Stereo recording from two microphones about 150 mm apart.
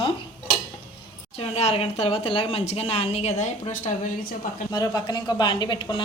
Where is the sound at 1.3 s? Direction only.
40° left (ahead or behind); by 4.6 s 65° left (ahead or behind).